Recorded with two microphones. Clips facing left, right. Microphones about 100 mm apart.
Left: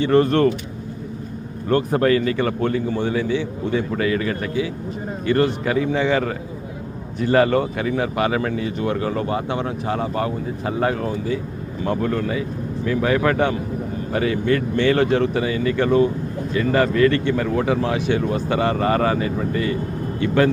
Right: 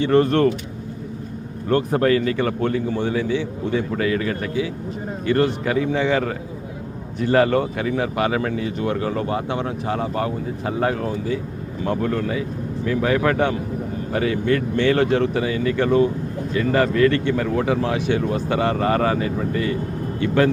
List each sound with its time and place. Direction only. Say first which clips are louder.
0.0 s speech: even; 25° left (ahead or behind)
1.7 s speech: even; 25° left (ahead or behind)